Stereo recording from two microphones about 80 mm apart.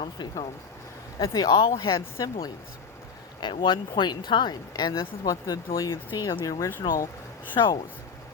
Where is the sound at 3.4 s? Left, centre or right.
Left.